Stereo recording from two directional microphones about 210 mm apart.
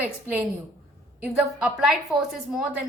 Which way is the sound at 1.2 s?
Centre (ahead or behind).